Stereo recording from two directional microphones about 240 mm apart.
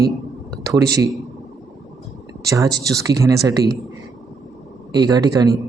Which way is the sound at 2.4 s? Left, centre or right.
Centre.